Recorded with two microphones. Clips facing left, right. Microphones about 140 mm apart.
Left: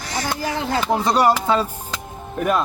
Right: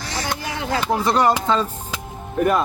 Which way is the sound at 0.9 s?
15° left (ahead or behind).